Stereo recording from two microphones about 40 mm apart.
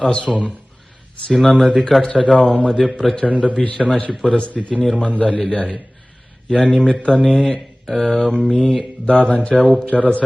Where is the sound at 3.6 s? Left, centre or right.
Left.